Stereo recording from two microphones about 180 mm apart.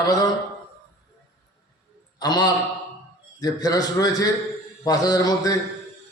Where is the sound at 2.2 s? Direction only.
20° left (ahead or behind).